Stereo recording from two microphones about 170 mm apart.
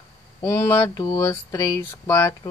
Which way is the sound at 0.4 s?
15° left (ahead or behind).